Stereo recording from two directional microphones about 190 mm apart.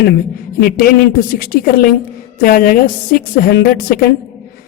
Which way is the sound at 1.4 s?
50° left (ahead or behind).